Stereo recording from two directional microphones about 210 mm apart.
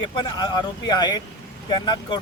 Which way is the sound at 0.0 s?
20° left (ahead or behind).